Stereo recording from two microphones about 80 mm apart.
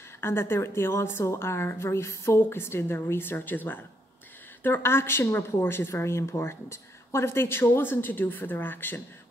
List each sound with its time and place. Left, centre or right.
0.2 s a woman's voice: left